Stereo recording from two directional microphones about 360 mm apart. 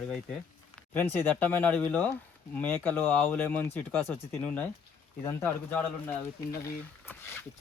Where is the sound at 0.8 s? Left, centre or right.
Centre.